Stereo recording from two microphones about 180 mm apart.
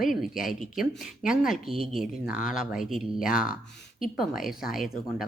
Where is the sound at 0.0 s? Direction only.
Centre (ahead or behind).